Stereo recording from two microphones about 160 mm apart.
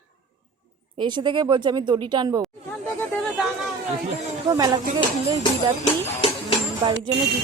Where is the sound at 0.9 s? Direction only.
30° right (ahead or behind).